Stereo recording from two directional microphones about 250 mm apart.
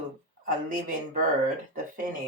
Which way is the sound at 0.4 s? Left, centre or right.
Right.